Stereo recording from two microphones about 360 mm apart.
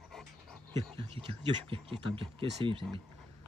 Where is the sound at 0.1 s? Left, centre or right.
Centre.